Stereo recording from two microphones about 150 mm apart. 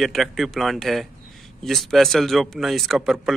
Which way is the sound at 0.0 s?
Centre (ahead or behind).